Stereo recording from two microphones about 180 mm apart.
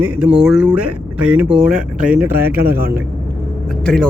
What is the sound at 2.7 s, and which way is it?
Speech, 55° right (ahead or behind).